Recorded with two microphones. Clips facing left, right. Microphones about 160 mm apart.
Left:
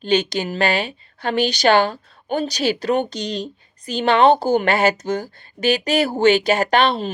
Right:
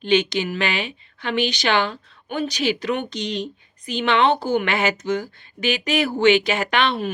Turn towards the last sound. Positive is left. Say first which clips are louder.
# left 4 dB
turn(degrees=35)  # may be behind; listen again after turning